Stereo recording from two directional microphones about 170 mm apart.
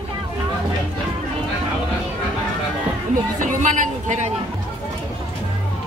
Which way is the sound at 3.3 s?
50° right (ahead or behind).